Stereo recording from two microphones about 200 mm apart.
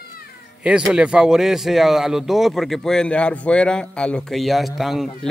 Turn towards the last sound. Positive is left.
turn(degrees=0)  # may be behind; listen again after turning